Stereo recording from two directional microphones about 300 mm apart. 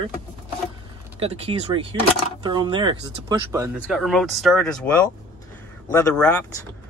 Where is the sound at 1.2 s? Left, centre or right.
Centre.